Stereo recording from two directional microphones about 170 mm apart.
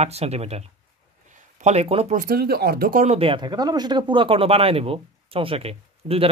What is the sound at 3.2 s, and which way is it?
Speech, 30° right (ahead or behind).